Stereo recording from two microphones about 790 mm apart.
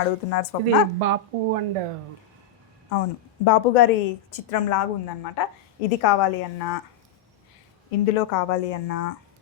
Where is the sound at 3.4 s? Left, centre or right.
Left.